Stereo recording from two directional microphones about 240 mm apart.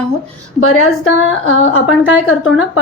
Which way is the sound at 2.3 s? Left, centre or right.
Left.